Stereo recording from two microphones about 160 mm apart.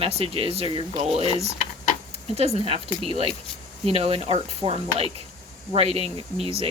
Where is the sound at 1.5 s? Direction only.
50° left (ahead or behind).